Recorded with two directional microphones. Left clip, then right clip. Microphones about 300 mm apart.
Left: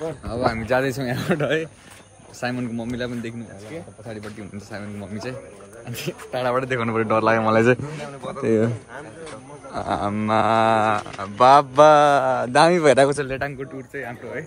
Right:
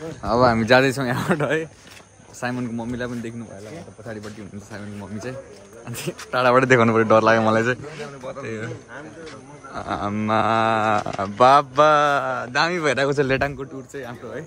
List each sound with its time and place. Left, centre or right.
0.2 s speech: centre
0.9 s a man's voice: centre
5.9 s a man's voice: centre
6.4 s speech: right
6.8 s a man's voice: centre
9.8 s mantra: centre
11.1 s a man's voice: centre
13.2 s speech: right
13.6 s mantra: centre